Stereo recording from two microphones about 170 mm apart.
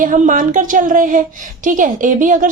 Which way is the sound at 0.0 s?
50° right (ahead or behind).